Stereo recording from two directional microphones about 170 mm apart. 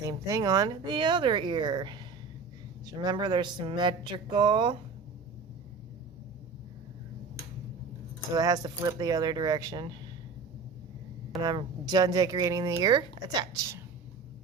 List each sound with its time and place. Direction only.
0.0 s speech: 20° right (ahead or behind)
8.3 s speech: 20° right (ahead or behind)
11.3 s speech: 25° right (ahead or behind)